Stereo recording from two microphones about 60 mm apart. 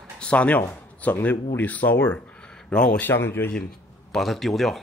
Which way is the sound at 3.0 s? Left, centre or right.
Left.